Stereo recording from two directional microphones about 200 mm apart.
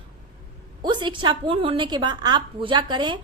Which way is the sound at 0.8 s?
25° right (ahead or behind).